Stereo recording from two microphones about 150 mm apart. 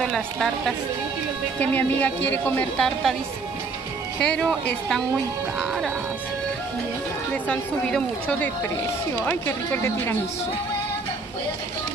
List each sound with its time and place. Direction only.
0.0 s speech: 5° left (ahead or behind)
4.2 s speech: 5° left (ahead or behind)
7.4 s speech: 5° left (ahead or behind)